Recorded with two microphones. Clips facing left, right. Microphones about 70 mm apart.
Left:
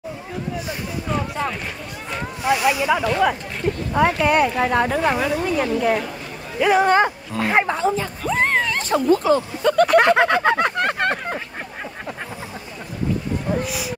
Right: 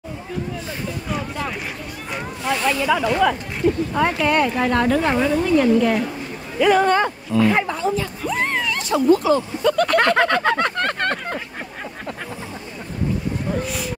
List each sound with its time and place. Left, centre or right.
2.4 s speech: centre
7.3 s speech: left
9.8 s a sound: centre
13.7 s speech: centre